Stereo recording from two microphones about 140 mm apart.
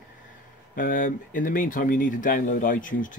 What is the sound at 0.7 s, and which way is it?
Speech, 80° left.